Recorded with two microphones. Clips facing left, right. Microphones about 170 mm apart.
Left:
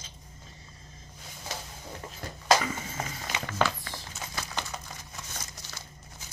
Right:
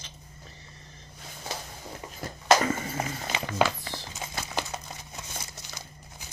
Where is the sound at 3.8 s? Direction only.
25° right (ahead or behind).